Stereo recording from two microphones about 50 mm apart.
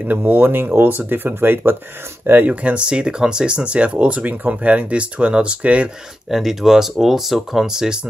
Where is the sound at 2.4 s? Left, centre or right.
Right.